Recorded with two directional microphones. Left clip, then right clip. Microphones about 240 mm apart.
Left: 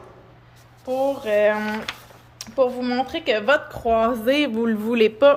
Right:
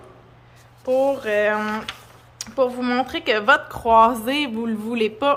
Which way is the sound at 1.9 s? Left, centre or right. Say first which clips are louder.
Left 1 dB; centre.